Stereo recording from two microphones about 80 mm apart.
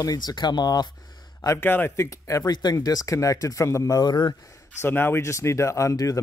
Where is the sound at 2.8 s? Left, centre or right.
Left.